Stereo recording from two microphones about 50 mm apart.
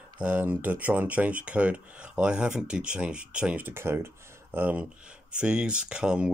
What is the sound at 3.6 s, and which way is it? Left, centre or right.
Speech, right.